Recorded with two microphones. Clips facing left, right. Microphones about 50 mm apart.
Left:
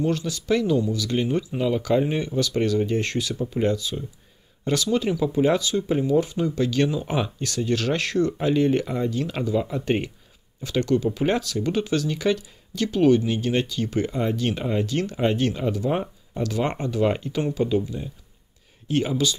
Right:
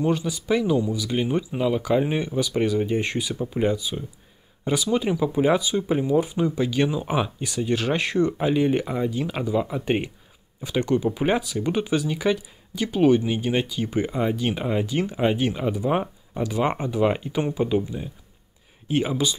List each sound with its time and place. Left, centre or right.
0.0 s speech: centre